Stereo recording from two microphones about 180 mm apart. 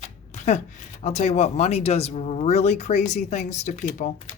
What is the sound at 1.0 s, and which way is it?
Speech, 40° left (ahead or behind).